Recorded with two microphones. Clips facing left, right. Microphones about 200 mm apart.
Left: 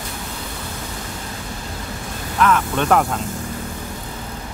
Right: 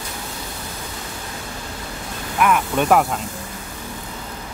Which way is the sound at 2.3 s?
15° right (ahead or behind).